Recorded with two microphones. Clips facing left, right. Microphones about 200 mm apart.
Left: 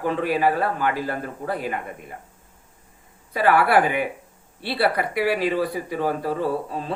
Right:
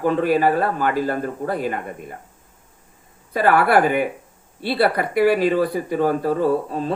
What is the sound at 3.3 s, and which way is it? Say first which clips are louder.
A man's voice: right 2 dB; 45° right (ahead or behind).